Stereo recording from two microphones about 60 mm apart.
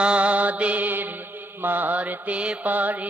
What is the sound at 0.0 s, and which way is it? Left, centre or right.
Mantra, centre.